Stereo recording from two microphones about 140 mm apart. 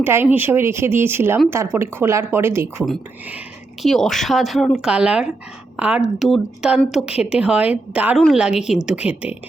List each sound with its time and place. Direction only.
0.0 s a woman's voice: 15° right (ahead or behind)
3.8 s a woman's voice: 5° left (ahead or behind)